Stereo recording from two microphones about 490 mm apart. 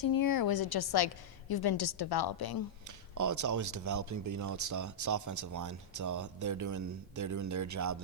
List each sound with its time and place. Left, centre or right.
0.0 s a woman's voice: left
3.2 s speech: right